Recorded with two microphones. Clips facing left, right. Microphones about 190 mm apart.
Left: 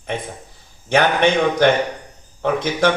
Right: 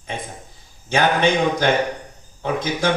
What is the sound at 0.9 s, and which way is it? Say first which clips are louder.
A man's voice: left 2 dB; 60° left (ahead or behind).